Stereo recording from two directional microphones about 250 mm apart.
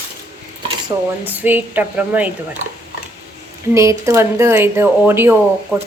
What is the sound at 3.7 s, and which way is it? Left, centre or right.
Speech, centre.